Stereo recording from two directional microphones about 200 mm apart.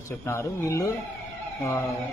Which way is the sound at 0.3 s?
15° left (ahead or behind).